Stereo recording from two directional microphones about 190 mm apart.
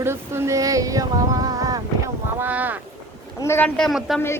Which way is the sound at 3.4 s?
10° left (ahead or behind).